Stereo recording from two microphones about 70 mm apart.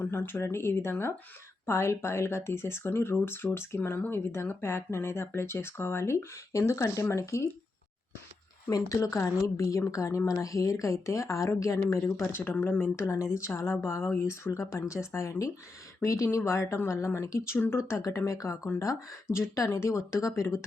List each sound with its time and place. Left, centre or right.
0.0 s speech: left
9.0 s speech: left
12.2 s speech: left